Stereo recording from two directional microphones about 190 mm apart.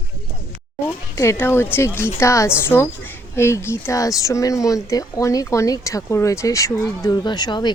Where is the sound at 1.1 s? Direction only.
15° left (ahead or behind).